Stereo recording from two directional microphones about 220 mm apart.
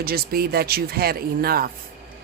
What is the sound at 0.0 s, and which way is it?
Speech, 45° right (ahead or behind).